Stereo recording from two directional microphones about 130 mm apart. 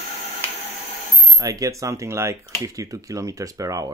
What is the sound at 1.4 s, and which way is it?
Speech, 25° right (ahead or behind).